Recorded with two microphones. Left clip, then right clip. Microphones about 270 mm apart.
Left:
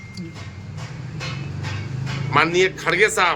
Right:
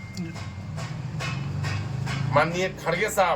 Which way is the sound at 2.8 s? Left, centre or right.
Left.